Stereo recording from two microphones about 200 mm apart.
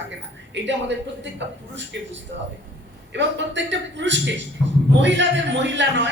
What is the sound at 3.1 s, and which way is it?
A man's voice, 65° right (ahead or behind).